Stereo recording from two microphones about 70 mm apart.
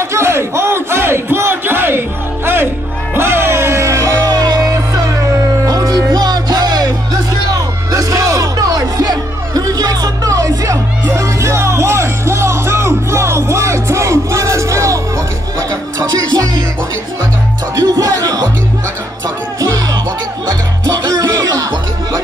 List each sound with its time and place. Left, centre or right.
0.1 s crowd: right
3.2 s music: right
7.5 s music: right
16.0 s music: right
17.7 s music: right
20.8 s music: right